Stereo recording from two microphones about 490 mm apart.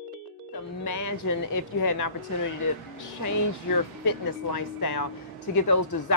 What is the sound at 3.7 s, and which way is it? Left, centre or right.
Speech, left.